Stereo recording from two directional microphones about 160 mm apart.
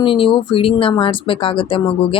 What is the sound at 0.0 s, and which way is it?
Speech, 30° left (ahead or behind).